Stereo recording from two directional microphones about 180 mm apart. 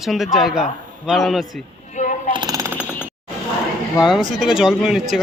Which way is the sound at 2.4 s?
20° right (ahead or behind).